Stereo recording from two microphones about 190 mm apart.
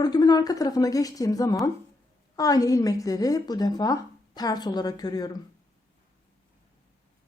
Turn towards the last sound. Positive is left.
turn(degrees=20)  # may be behind; listen again after turning